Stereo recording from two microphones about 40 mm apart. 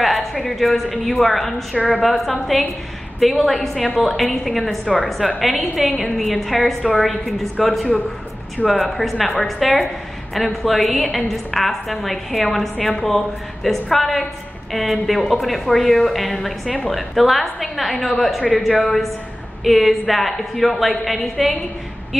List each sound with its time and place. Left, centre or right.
0.0 s a woman's voice: centre
1.8 s a woman's voice: left
2.0 s a woman's voice: centre
10.3 s a woman's voice: centre